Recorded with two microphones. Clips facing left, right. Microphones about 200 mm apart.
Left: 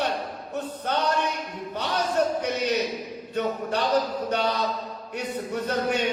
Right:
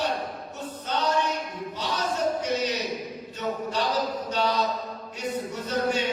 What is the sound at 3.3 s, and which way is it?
Mantra, 60° left (ahead or behind).